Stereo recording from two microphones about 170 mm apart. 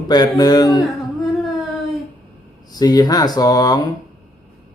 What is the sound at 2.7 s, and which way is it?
Speech, 25° left (ahead or behind).